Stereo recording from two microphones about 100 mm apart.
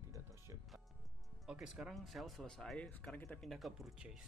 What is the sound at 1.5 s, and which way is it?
Speech, 5° right (ahead or behind).